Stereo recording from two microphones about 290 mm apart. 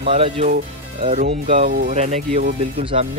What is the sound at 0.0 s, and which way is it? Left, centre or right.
Speech, centre.